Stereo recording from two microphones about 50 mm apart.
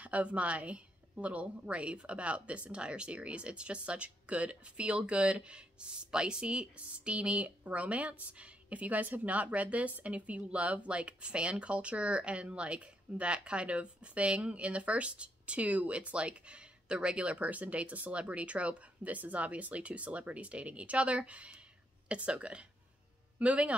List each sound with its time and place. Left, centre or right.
0.0 s speech: right